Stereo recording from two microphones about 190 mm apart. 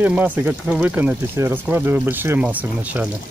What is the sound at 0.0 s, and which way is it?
Speech, 10° right (ahead or behind).